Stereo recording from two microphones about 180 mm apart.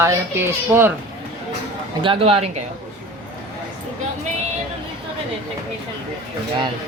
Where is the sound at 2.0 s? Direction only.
30° right (ahead or behind).